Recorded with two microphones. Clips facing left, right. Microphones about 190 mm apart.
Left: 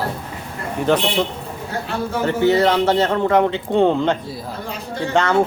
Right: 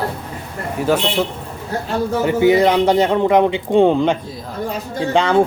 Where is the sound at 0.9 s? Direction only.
5° right (ahead or behind).